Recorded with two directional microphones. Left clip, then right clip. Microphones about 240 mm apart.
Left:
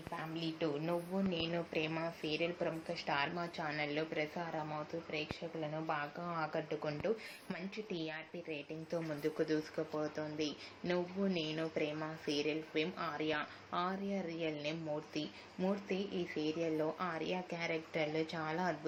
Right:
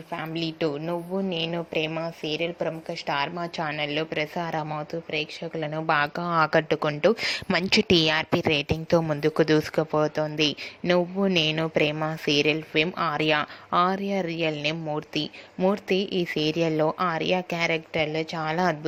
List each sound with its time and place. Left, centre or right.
0.3 s speech: right